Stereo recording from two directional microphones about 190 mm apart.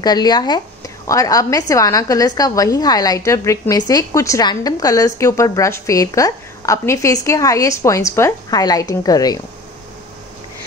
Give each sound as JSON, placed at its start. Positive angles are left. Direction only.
{"t": 0.0, "sound": "a woman's voice", "side_deg": 20}